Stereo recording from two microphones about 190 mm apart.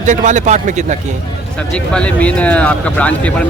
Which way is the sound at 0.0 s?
40° right (ahead or behind).